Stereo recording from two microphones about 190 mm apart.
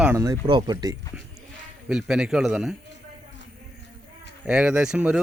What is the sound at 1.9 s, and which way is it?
Speech, 5° right (ahead or behind).